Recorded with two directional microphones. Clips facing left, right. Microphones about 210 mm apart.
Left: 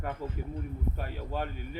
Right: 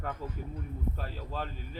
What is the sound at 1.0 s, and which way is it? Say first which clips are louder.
Speech: left 3 dB; 15° left (ahead or behind).